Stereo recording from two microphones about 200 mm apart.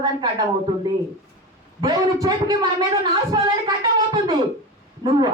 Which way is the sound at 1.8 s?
20° right (ahead or behind).